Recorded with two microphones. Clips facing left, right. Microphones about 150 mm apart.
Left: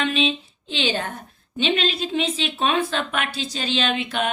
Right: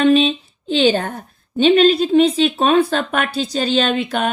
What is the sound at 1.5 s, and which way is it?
Speech, 45° right (ahead or behind).